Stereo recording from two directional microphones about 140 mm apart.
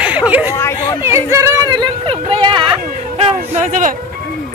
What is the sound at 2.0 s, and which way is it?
Speech, 40° right (ahead or behind).